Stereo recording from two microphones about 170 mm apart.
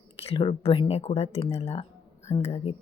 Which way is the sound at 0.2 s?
35° left (ahead or behind).